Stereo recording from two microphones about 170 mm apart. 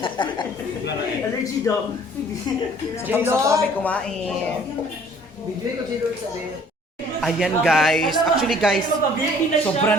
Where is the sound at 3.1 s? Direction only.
15° right (ahead or behind).